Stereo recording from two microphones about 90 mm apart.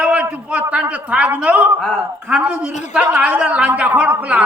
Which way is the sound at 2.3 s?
15° right (ahead or behind).